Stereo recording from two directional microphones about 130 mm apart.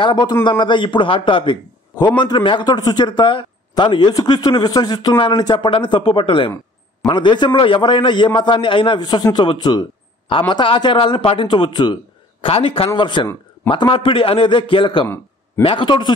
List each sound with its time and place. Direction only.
0.0 s a man's voice: 35° left (ahead or behind)
5.1 s a man's voice: 40° left (ahead or behind)